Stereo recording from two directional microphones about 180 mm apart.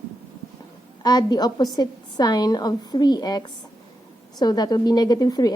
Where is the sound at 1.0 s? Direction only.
20° left (ahead or behind).